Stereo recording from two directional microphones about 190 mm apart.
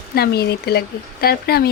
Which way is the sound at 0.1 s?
55° left (ahead or behind).